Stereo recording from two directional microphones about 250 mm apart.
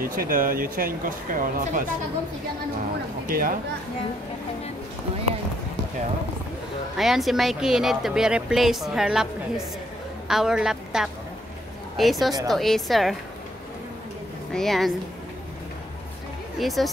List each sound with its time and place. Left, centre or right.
0.0 s speech: right
3.3 s speech: right
7.0 s a woman's voice: centre
14.5 s speech: centre
16.5 s speech: centre